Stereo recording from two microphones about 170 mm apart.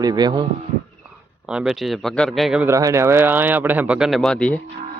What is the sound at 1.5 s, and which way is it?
A man's voice, 5° right (ahead or behind).